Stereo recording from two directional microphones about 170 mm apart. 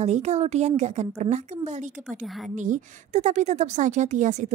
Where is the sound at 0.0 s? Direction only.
40° right (ahead or behind).